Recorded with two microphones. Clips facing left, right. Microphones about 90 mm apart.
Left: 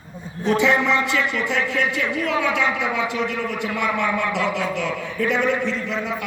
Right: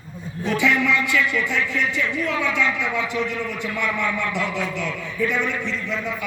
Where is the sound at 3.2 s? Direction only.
55° left (ahead or behind).